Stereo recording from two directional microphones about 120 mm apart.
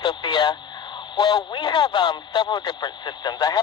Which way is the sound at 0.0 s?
40° left (ahead or behind).